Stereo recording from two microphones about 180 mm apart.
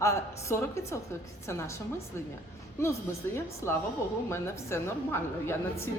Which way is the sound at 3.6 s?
15° left (ahead or behind).